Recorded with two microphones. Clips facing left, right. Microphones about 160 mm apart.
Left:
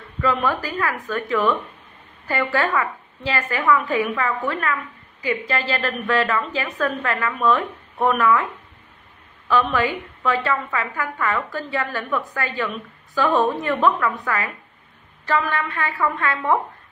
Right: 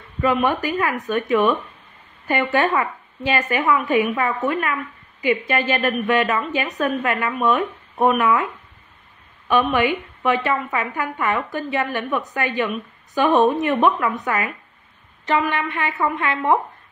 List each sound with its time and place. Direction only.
0.2 s a woman's voice: 20° right (ahead or behind)
9.5 s a woman's voice: 20° right (ahead or behind)